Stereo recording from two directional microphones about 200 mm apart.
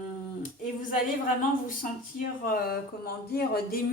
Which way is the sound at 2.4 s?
50° left (ahead or behind).